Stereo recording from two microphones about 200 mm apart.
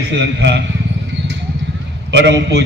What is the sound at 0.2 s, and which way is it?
Speech, 65° right (ahead or behind).